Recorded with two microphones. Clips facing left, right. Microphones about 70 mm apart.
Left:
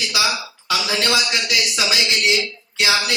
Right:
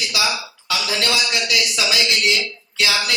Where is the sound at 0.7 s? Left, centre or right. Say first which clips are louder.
Left 2 dB; left.